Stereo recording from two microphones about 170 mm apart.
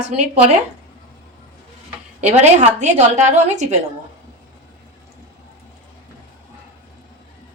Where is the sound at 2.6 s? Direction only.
45° right (ahead or behind).